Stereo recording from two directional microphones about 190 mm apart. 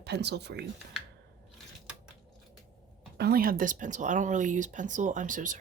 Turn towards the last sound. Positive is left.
turn(degrees=-45)  # may be behind; listen again after turning